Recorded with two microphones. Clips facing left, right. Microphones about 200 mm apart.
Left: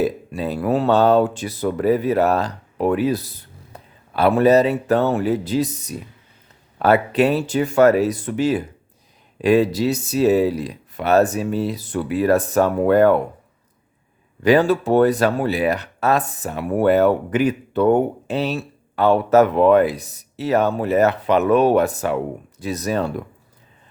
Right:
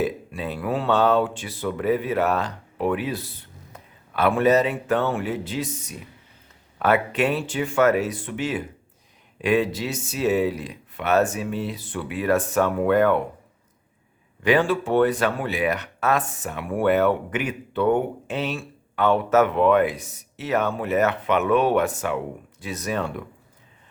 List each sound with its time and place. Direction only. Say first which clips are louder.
0.0 s speech: left 4 dB; 40° left (ahead or behind)
14.4 s speech: left 5 dB; 40° left (ahead or behind)